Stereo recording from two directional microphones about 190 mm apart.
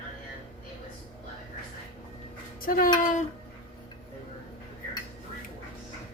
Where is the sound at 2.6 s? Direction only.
45° left (ahead or behind).